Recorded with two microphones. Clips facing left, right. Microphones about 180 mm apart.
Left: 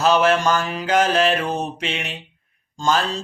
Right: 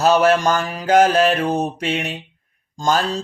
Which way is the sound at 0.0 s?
40° right (ahead or behind).